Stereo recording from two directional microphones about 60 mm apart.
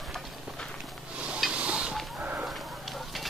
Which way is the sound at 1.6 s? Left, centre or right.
Centre.